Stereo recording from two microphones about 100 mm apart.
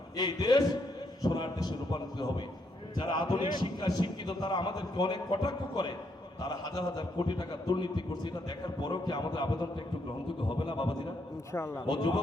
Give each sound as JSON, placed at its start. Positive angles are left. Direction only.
{"t": 0.2, "sound": "a man's voice", "side_deg": 45}
{"t": 11.5, "sound": "a man's voice", "side_deg": 25}
{"t": 11.9, "sound": "a man's voice", "side_deg": 50}